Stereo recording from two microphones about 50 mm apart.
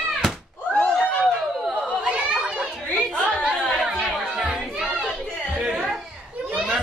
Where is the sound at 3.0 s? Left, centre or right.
Centre.